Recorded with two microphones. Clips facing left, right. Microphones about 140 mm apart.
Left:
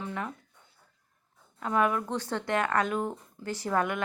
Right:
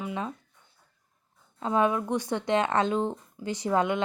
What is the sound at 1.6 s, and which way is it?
Speech, 25° right (ahead or behind).